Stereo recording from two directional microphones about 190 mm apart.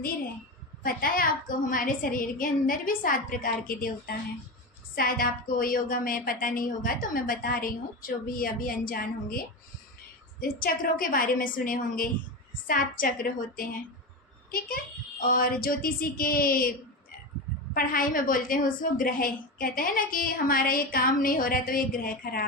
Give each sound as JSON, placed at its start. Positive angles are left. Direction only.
{"t": 0.8, "sound": "a woman's voice", "side_deg": 50}
{"t": 10.4, "sound": "a woman's voice", "side_deg": 50}
{"t": 15.2, "sound": "a woman's voice", "side_deg": 50}
{"t": 17.7, "sound": "a woman's voice", "side_deg": 45}